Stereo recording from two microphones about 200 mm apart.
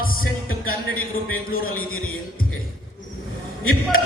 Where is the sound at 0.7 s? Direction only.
90° left.